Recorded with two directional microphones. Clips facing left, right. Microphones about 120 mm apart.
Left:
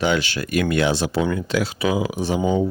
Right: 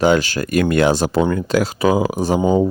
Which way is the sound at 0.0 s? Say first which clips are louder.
Right 6 dB; 40° right (ahead or behind).